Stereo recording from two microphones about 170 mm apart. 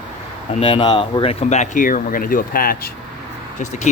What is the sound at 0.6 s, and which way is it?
Speech, 25° left (ahead or behind).